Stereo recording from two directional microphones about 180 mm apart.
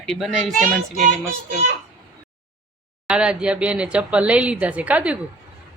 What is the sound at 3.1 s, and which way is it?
Speech, 5° right (ahead or behind).